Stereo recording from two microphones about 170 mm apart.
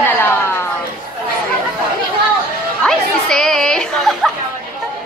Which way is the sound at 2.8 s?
5° left (ahead or behind).